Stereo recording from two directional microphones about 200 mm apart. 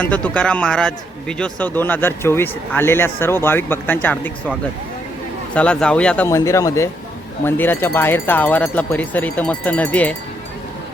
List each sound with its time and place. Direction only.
0.0 s speech: 5° left (ahead or behind)
5.5 s speech: 5° left (ahead or behind)